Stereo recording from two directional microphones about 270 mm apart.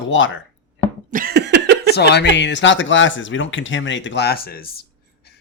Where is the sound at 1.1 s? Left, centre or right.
Right.